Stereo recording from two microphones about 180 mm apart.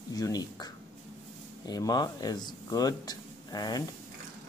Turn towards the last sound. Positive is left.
turn(degrees=20)  # may be behind; listen again after turning